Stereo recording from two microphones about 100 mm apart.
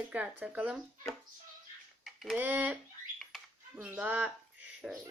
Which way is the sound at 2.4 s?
15° right (ahead or behind).